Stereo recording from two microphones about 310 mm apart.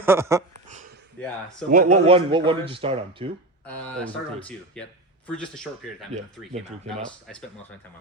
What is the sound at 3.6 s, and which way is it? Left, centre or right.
Speech, centre.